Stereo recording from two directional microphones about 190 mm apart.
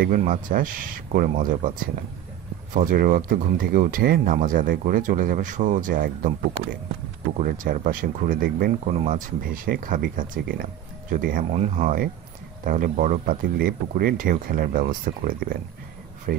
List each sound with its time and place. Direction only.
0.0 s speech: 45° right (ahead or behind)
2.7 s speech: 45° right (ahead or behind)
7.3 s speech: 45° right (ahead or behind)
8.8 s speech: 35° right (ahead or behind); by 16.4 s 50° right (ahead or behind)